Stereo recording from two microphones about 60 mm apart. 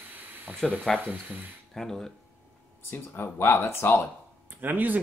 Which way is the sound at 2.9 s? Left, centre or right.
Left.